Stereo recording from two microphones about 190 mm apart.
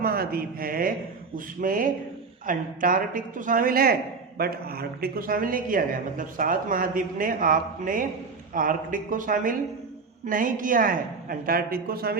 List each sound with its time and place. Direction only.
0.0 s a woman's voice: 50° right (ahead or behind)